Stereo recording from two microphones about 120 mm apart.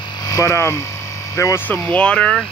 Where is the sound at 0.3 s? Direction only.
25° left (ahead or behind).